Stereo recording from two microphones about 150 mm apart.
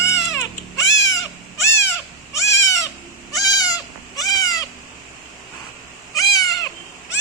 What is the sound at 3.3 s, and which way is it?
Goat, 25° left (ahead or behind).